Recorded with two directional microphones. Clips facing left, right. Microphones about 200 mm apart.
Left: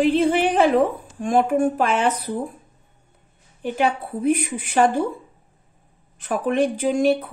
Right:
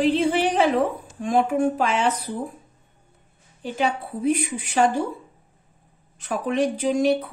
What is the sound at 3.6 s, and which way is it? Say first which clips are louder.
Speech: left 3 dB; 55° left (ahead or behind).